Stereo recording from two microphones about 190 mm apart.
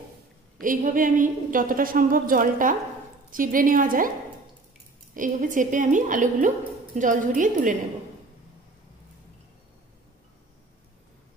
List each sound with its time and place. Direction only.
0.6 s a woman's voice: 45° right (ahead or behind)
5.1 s a woman's voice: 45° right (ahead or behind)